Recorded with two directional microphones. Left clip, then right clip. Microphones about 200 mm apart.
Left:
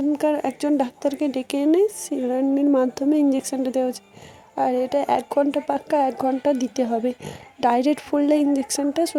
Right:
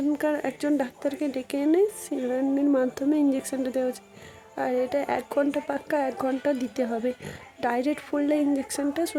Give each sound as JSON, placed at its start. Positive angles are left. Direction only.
{"t": 0.1, "sound": "speech", "side_deg": 20}